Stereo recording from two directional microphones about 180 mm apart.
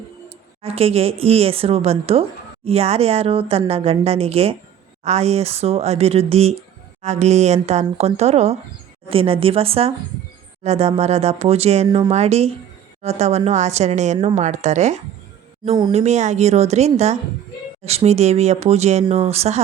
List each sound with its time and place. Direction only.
0.3 s speech: 35° right (ahead or behind)